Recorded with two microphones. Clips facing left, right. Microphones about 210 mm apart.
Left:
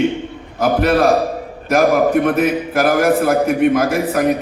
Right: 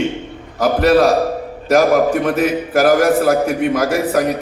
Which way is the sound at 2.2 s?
55° left (ahead or behind).